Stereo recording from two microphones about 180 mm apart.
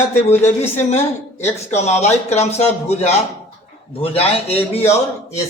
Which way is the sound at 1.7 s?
40° left (ahead or behind).